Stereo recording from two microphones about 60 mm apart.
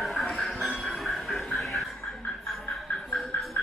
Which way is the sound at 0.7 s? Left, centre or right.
Centre.